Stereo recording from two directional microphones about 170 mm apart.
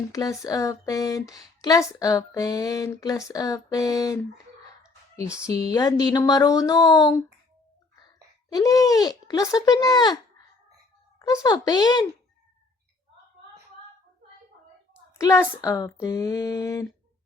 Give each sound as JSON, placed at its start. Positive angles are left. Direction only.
{"t": 0.1, "sound": "speech", "side_deg": 20}
{"t": 5.5, "sound": "speech", "side_deg": 20}
{"t": 8.5, "sound": "speech", "side_deg": 20}
{"t": 11.2, "sound": "speech", "side_deg": 20}
{"t": 15.2, "sound": "speech", "side_deg": 15}